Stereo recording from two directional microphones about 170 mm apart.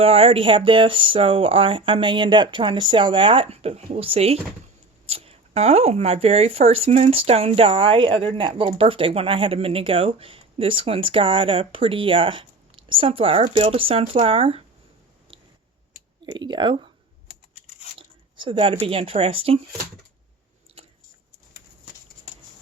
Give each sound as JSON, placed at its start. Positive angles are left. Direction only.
{"t": 0.0, "sound": "speech", "side_deg": -35}
{"t": 16.2, "sound": "speech", "side_deg": -25}
{"t": 17.9, "sound": "speech", "side_deg": -30}
{"t": 20.8, "sound": "chewing", "side_deg": -35}